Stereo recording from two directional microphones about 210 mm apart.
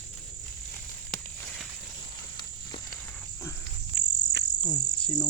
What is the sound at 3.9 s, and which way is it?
Cricket, 55° right (ahead or behind).